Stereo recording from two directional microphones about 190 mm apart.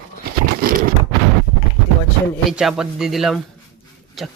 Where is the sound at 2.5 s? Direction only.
5° right (ahead or behind).